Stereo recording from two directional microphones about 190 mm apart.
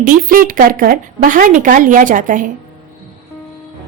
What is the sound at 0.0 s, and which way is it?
A woman's voice, 45° right (ahead or behind).